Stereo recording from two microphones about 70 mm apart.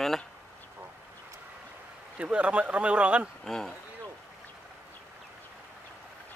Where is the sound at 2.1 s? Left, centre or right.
Centre.